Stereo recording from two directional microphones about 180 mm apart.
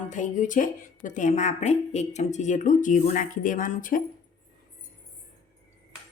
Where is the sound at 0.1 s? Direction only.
45° left (ahead or behind).